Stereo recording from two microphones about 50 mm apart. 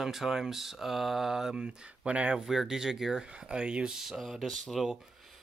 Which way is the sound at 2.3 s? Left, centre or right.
Centre.